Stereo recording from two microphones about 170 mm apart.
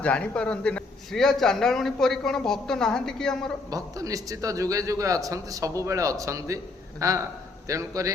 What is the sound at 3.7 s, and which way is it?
Speech, 20° right (ahead or behind).